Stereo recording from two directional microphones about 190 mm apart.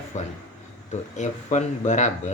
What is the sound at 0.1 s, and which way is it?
Speech, 40° left (ahead or behind).